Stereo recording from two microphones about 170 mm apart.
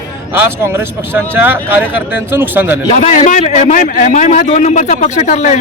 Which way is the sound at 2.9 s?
45° left (ahead or behind).